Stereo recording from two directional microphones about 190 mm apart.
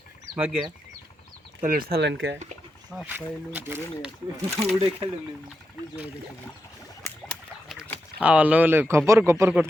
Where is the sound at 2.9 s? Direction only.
5° right (ahead or behind).